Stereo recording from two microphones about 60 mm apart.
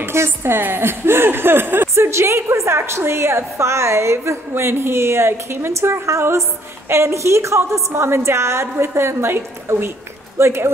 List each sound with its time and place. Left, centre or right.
0.0 s a woman's voice: right
2.0 s a woman's voice: right